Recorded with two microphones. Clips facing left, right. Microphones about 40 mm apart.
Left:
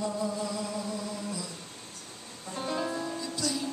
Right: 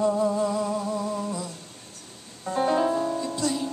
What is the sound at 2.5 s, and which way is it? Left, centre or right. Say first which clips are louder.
Music: right 10 dB; right.